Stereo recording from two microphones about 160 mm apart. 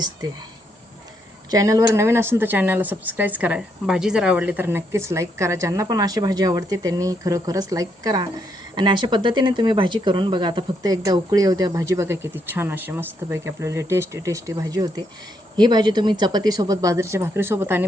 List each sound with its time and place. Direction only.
1.5 s a woman's voice: 20° right (ahead or behind)